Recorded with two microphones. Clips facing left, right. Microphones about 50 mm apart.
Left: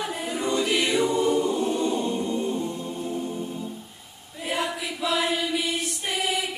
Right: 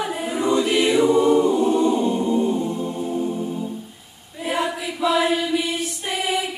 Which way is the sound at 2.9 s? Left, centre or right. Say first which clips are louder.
Right 6 dB; centre.